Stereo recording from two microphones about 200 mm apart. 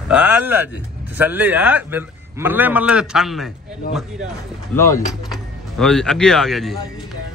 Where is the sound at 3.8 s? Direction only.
45° left (ahead or behind).